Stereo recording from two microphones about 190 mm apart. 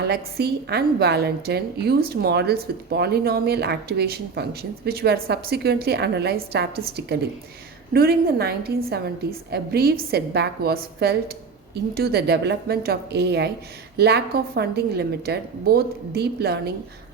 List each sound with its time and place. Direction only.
0.0 s a woman's voice: 55° right (ahead or behind)